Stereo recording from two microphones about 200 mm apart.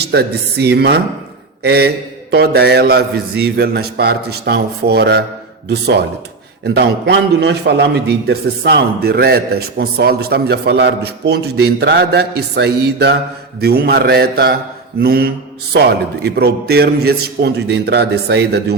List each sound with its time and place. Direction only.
0.1 s a man's voice: 55° right (ahead or behind)